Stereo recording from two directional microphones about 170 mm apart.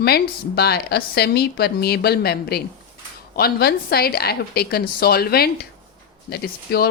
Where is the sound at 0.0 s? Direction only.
70° left (ahead or behind).